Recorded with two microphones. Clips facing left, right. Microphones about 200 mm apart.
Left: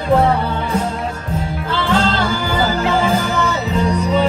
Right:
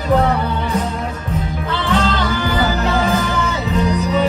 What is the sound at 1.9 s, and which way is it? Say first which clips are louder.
Music: left 1 dB; 30° left (ahead or behind).